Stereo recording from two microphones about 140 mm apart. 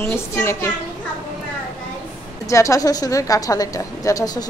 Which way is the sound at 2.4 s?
20° left (ahead or behind).